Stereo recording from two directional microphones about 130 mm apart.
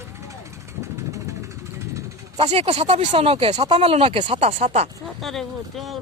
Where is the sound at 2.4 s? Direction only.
50° right (ahead or behind).